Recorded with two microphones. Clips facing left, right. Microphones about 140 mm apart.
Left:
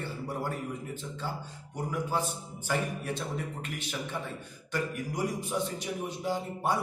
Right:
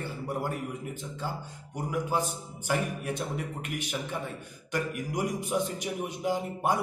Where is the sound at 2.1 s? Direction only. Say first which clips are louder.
Right 2 dB; 15° right (ahead or behind).